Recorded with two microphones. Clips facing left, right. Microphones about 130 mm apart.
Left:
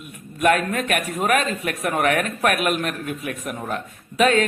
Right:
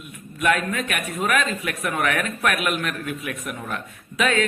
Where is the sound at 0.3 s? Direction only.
45° left (ahead or behind).